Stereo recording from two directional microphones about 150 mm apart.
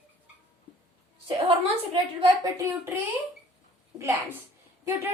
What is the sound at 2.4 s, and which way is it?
Speech, 20° right (ahead or behind).